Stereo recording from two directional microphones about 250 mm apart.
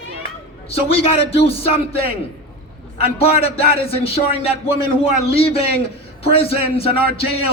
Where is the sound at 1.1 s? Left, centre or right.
Left.